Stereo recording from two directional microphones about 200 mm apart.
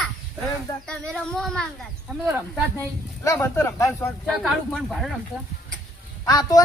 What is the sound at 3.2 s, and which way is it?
Speech, 15° left (ahead or behind).